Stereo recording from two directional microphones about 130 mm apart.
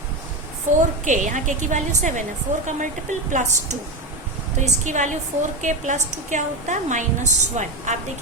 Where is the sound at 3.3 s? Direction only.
75° right (ahead or behind).